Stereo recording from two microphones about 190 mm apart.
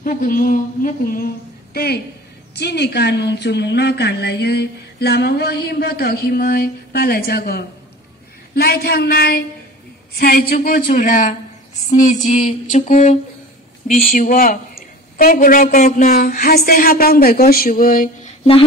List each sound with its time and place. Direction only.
0.0 s a woman's voice: 45° left (ahead or behind)
11.9 s music: 40° left (ahead or behind)
13.8 s speech: 45° left (ahead or behind)